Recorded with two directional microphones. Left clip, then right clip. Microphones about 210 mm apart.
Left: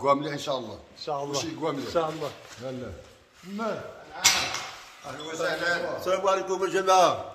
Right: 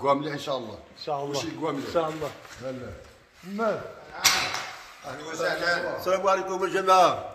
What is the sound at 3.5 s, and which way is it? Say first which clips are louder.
Speech: right 4 dB; 30° right (ahead or behind).